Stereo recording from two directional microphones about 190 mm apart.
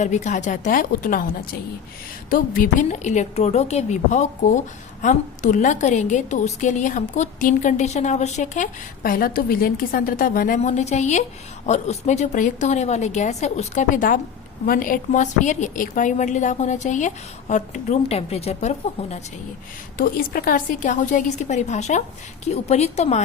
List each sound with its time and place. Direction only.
0.0 s a woman's voice: 40° left (ahead or behind)
2.3 s a woman's voice: 45° left (ahead or behind)
20.0 s a woman's voice: 50° left (ahead or behind)